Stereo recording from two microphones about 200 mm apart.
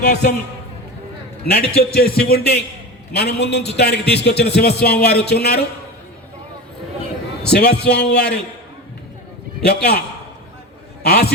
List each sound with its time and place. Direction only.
0.0 s a man's voice: 55° left (ahead or behind)
1.5 s a man's voice: 50° left (ahead or behind)
7.4 s a man's voice: 55° left (ahead or behind)
9.6 s a man's voice: 55° left (ahead or behind)
11.0 s a man's voice: 50° left (ahead or behind)